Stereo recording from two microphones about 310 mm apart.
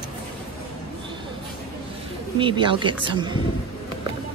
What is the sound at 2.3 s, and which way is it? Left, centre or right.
Speech, centre.